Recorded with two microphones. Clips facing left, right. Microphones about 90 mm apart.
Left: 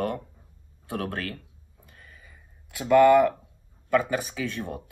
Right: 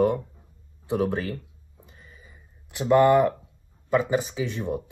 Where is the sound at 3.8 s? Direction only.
20° right (ahead or behind).